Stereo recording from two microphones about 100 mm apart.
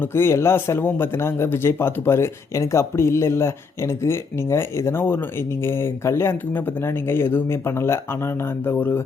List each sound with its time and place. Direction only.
0.0 s speech: 25° left (ahead or behind)